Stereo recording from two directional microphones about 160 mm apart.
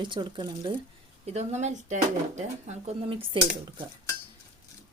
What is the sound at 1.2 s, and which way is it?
Speech, 45° right (ahead or behind).